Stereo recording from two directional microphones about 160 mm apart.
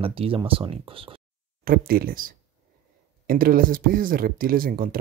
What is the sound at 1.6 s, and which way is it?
Speech, 70° right (ahead or behind).